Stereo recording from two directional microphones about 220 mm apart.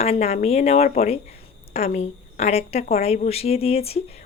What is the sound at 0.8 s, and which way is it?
Speech, 40° left (ahead or behind).